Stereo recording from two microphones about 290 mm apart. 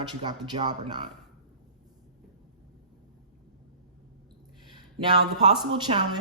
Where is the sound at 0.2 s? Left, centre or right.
Centre.